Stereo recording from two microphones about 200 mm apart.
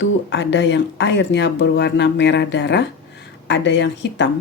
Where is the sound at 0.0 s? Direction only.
65° left (ahead or behind).